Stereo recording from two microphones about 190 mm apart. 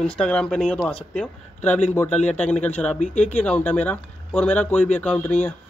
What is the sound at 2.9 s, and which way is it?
Speech, 40° left (ahead or behind).